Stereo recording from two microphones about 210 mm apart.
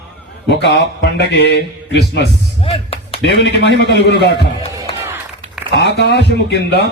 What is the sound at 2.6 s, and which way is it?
Music, 25° left (ahead or behind).